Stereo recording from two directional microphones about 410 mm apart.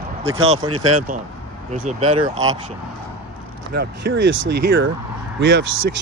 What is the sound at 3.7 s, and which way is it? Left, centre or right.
Speech, right.